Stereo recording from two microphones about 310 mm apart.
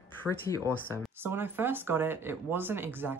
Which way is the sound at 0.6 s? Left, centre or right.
Centre.